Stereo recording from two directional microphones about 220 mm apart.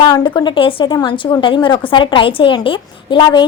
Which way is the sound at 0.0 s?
20° left (ahead or behind).